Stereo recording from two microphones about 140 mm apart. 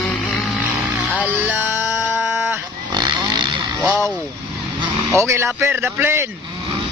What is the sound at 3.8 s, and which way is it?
Speech, 10° right (ahead or behind).